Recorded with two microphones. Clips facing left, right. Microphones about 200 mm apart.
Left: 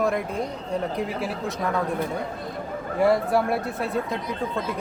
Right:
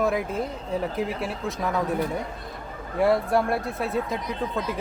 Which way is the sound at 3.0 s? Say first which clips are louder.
Left 1 dB; centre (ahead or behind).